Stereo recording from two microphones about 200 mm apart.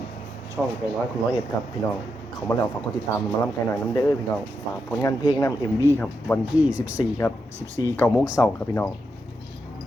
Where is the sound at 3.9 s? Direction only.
20° left (ahead or behind).